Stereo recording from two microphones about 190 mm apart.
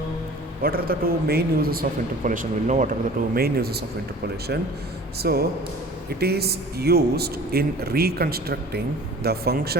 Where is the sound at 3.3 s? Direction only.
55° right (ahead or behind).